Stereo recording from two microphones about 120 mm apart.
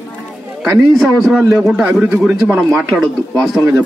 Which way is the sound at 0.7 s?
5° right (ahead or behind).